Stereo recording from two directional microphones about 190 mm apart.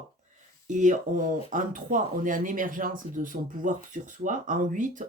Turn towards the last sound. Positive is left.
turn(degrees=-40)  # may be behind; listen again after turning